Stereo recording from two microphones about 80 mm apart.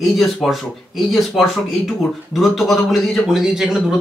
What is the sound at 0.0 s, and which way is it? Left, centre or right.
Speech, centre.